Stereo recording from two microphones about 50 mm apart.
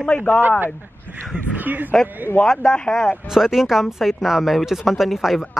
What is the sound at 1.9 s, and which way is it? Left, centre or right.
Speech, centre.